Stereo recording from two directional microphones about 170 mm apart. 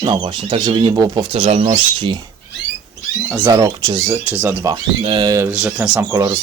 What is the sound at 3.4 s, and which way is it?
Speech, 20° right (ahead or behind).